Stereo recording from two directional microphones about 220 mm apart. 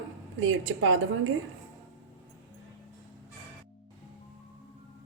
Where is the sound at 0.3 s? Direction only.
65° right (ahead or behind).